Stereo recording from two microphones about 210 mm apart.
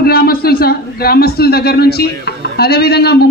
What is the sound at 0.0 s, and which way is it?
A man's voice, 45° left (ahead or behind).